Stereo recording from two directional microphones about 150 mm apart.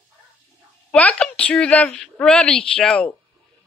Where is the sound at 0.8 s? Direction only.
10° left (ahead or behind).